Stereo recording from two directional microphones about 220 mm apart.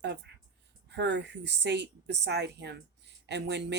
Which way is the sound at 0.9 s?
50° right (ahead or behind).